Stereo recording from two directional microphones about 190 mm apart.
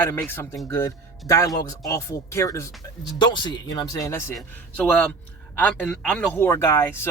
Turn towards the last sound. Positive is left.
turn(degrees=15)  # may be behind; listen again after turning